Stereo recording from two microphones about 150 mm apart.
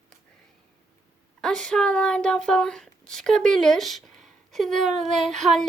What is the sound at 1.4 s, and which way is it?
Speech, 5° left (ahead or behind).